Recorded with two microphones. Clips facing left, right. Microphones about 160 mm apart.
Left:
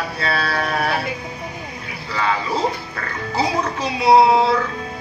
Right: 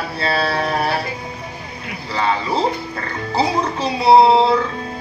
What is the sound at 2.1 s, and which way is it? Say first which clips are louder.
Speech: right 2 dB; 30° right (ahead or behind).